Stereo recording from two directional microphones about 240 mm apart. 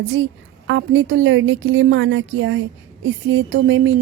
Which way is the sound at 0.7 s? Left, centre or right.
Right.